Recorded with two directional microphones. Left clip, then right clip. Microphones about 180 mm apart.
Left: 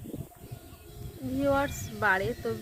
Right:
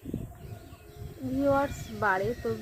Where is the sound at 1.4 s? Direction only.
15° left (ahead or behind).